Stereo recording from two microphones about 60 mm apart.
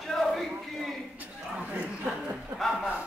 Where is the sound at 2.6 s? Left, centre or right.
Centre.